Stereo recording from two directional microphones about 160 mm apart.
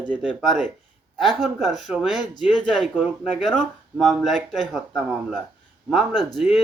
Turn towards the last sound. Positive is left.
turn(degrees=0)  # may be behind; listen again after turning